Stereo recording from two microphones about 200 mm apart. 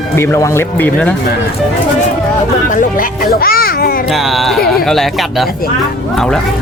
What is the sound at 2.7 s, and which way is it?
A child's voice, 45° left (ahead or behind).